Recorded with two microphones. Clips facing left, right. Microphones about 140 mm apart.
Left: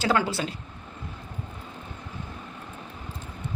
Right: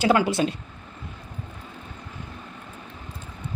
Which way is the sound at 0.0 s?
15° right (ahead or behind).